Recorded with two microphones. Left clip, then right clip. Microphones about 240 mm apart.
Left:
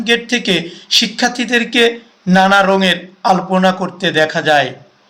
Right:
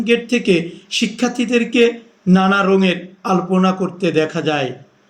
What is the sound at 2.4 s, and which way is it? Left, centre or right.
A man's voice, centre.